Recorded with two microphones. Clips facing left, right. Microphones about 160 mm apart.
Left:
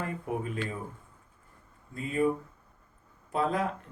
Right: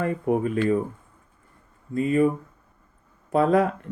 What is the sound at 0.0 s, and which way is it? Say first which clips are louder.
Speech: right 10 dB; 65° right (ahead or behind).